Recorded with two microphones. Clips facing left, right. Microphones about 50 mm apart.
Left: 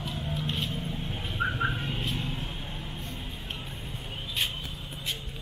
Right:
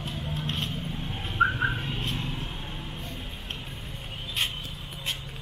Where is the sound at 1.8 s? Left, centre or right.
Right.